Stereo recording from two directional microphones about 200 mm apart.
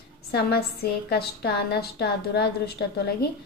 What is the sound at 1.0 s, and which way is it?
A woman's voice, 50° left (ahead or behind).